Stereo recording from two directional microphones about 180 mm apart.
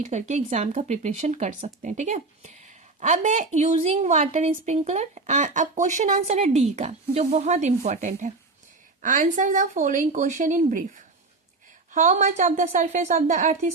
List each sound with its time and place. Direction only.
0.0 s a woman's voice: 40° right (ahead or behind)